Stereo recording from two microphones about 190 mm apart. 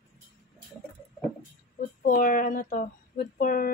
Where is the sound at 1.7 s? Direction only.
45° left (ahead or behind).